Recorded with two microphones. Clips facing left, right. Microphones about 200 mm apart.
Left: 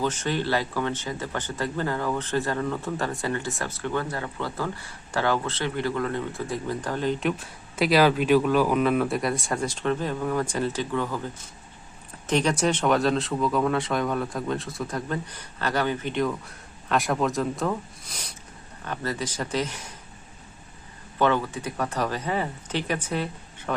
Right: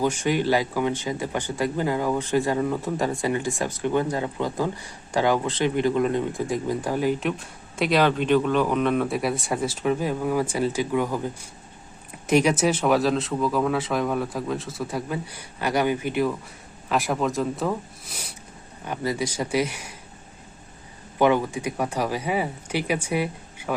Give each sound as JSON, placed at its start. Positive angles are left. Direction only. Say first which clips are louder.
{"t": 0.0, "sound": "speech", "louder": "right 4 dB", "side_deg": -15}
{"t": 7.2, "sound": "speech", "louder": "even", "side_deg": 0}
{"t": 21.2, "sound": "speech", "louder": "right 3 dB", "side_deg": -15}